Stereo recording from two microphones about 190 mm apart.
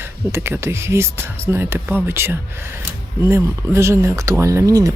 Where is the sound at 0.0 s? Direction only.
15° right (ahead or behind).